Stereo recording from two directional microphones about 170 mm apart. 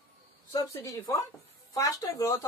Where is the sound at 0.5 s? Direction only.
20° left (ahead or behind).